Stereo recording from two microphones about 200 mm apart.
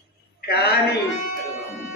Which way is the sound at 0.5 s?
55° left (ahead or behind).